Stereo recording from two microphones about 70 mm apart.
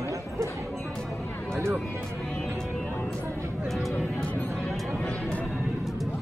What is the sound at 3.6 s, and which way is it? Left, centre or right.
Speech, centre.